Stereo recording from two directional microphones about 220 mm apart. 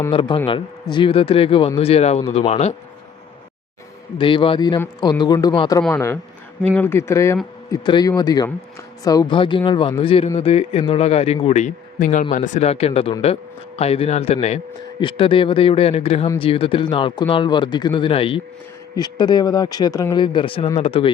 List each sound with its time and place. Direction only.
0.1 s speech: 20° left (ahead or behind)
4.2 s speech: 25° left (ahead or behind)